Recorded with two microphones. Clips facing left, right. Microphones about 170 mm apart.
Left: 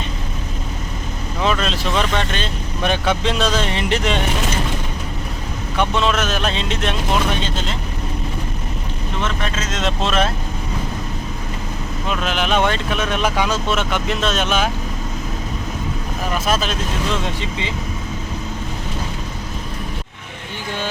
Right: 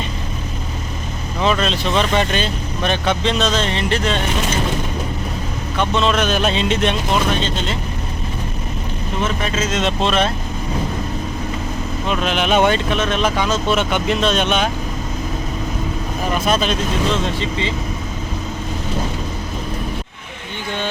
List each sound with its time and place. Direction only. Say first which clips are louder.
1.4 s speech: right 2 dB; centre (ahead or behind)
2.8 s speech: even; 10° left (ahead or behind)
5.7 s speech: right 1 dB; 10° left (ahead or behind)
9.2 s speech: right 4 dB; 5° right (ahead or behind)
12.0 s speech: right 2 dB; centre (ahead or behind)
13.0 s speech: right 1 dB; 10° left (ahead or behind)
13.7 s speech: right 3 dB; centre (ahead or behind)
16.3 s speech: right 3 dB; 5° left (ahead or behind)
17.2 s speech: right 3 dB; 15° left (ahead or behind)